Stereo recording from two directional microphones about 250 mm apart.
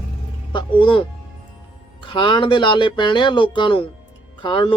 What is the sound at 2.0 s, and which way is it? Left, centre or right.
Speech, centre.